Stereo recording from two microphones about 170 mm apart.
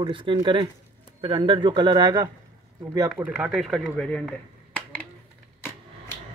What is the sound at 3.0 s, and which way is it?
Speech, 10° right (ahead or behind).